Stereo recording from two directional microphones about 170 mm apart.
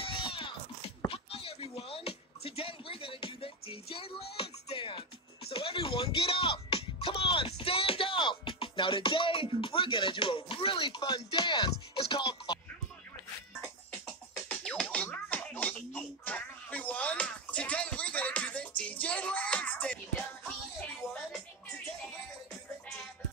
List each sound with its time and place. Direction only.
0.0 s a sound: 30° left (ahead or behind)
4.4 s music: 35° left (ahead or behind)
14.5 s music: 5° left (ahead or behind)